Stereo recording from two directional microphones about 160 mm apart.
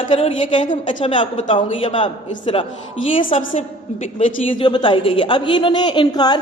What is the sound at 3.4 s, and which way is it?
A woman's voice, 50° left (ahead or behind).